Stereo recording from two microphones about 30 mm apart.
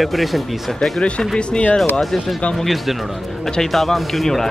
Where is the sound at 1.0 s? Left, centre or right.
Left.